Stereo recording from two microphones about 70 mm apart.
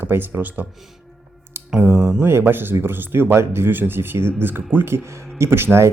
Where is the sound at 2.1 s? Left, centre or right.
Right.